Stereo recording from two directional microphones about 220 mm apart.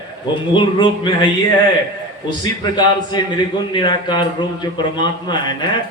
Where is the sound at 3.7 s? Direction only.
20° left (ahead or behind).